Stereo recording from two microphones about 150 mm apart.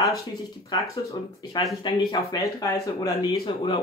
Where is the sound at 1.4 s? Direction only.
30° left (ahead or behind).